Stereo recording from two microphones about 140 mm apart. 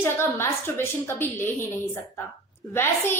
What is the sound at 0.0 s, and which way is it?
A woman's voice, 15° left (ahead or behind).